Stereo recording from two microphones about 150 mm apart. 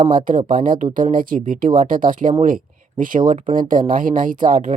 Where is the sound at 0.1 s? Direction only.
65° right (ahead or behind).